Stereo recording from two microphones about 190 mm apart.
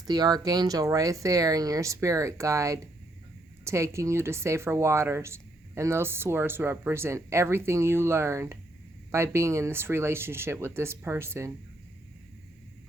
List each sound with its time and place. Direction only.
0.0 s speech: 20° right (ahead or behind)